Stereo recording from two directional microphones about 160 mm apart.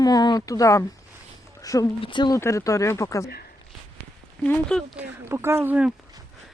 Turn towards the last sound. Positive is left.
turn(degrees=-10)  # may be behind; listen again after turning